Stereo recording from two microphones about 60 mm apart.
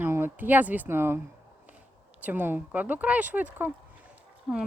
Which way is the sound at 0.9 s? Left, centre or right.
Right.